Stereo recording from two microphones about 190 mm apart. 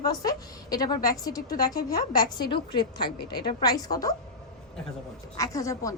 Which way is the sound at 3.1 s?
55° left (ahead or behind).